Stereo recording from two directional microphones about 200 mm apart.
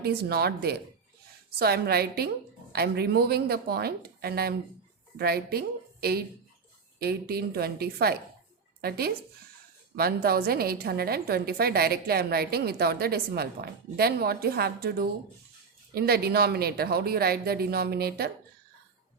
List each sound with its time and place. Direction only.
0.0 s a woman's voice: 50° right (ahead or behind)